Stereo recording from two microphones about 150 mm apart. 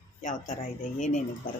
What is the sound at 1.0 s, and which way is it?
Speech, 55° left (ahead or behind).